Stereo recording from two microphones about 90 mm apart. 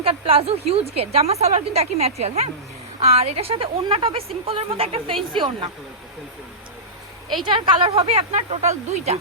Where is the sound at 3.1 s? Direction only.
90° right.